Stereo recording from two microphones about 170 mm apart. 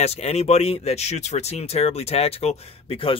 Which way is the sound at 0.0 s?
40° left (ahead or behind).